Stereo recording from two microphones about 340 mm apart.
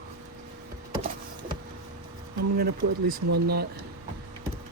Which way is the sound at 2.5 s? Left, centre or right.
Right.